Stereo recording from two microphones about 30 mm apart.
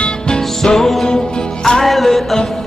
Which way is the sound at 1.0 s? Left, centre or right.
Left.